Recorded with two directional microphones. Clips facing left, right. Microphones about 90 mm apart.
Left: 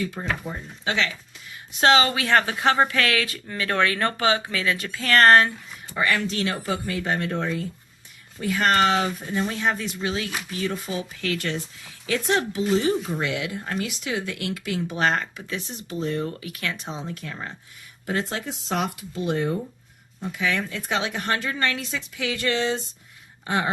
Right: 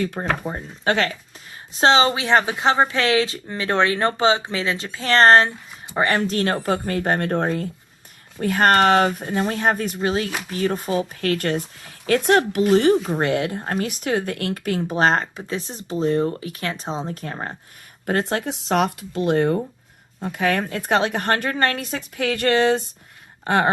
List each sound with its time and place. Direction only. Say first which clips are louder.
0.0 s a woman's voice: right 5 dB; 55° right (ahead or behind)
1.7 s a woman's voice: right 2 dB; 30° right (ahead or behind); by 13.0 s 65° right (ahead or behind)
13.1 s speech: right 6 dB; 45° right (ahead or behind)
18.0 s a woman's voice: right 5 dB; 55° right (ahead or behind)